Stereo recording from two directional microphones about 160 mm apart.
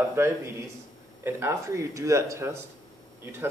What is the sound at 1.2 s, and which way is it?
Speech, 15° right (ahead or behind).